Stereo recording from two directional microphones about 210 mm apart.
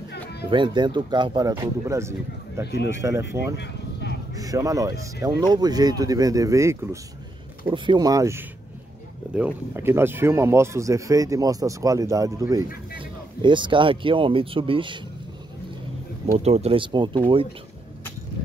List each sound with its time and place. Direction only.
0.1 s music: 50° left (ahead or behind)
0.5 s speech: 20° right (ahead or behind)
2.6 s a man's voice: 50° left (ahead or behind)
3.0 s speech: 15° right (ahead or behind)
3.5 s a sound: 55° left (ahead or behind)
4.4 s speech: 15° right (ahead or behind)
16.4 s speech: 30° right (ahead or behind)